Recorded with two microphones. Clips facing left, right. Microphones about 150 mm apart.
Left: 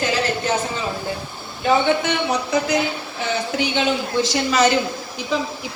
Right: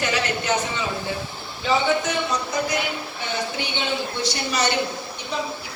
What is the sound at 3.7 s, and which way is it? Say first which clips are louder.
A woman's voice: left 6 dB; 90° left.